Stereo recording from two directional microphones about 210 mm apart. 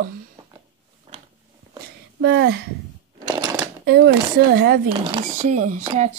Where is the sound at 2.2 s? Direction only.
55° right (ahead or behind).